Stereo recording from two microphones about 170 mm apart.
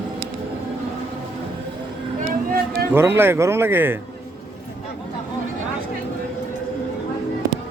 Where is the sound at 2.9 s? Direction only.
15° right (ahead or behind).